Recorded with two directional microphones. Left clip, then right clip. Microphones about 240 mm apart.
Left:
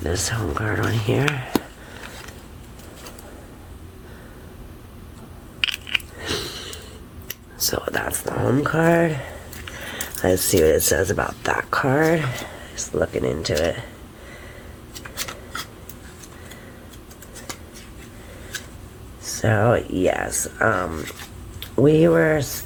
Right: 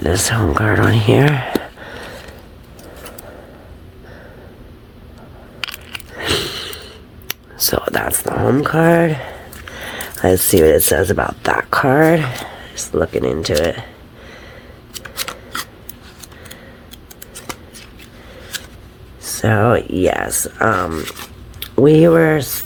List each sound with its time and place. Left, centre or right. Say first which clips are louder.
0.0 s speech: right 8 dB; right
6.1 s a sound: right 8 dB; right
9.7 s speech: right 5 dB; right
14.9 s shuffling cards: right 6 dB; right
19.2 s speech: right 4 dB; right
20.9 s speech: right 7 dB; right
21.6 s speech: right 6 dB; right